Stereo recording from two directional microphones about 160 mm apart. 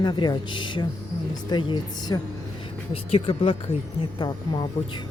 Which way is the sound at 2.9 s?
35° left (ahead or behind).